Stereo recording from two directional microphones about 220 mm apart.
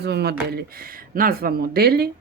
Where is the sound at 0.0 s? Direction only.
50° right (ahead or behind).